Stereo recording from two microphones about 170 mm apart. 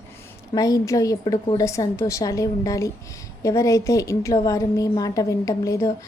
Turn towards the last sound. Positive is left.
turn(degrees=20)  # may be behind; listen again after turning